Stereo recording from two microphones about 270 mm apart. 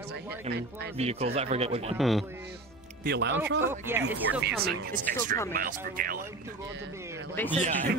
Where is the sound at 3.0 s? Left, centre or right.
Right.